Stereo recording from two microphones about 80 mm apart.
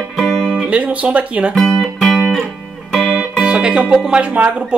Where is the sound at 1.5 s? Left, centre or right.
Centre.